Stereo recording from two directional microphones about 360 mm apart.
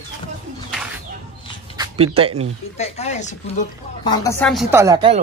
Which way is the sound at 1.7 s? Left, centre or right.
Centre.